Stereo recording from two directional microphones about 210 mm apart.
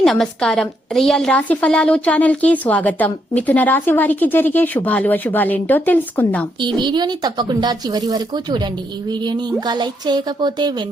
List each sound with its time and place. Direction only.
0.0 s a woman's voice: centre (ahead or behind)
6.7 s speech: 20° right (ahead or behind)